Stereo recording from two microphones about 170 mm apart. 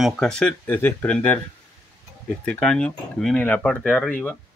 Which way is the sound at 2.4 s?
5° left (ahead or behind).